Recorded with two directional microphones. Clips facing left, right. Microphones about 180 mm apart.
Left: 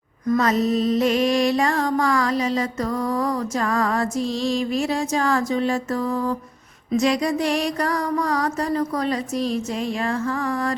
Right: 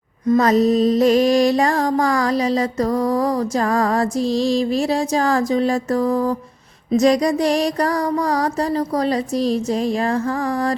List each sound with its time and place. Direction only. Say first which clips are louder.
0.3 s mantra: right 5 dB; 35° right (ahead or behind)